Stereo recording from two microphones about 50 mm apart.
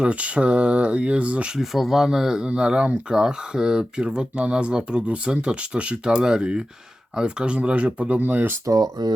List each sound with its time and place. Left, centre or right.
0.0 s speech: right
1.5 s speech: centre; by 8.2 s right
8.2 s speech: right